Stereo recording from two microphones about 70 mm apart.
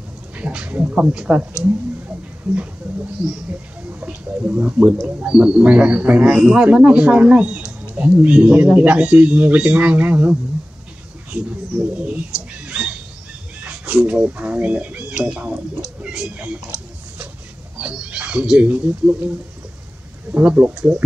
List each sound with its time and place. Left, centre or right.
0.4 s speech: centre
3.5 s speech: right
11.8 s speech: right
15.2 s speech: centre
17.7 s speech: centre
20.3 s speech: right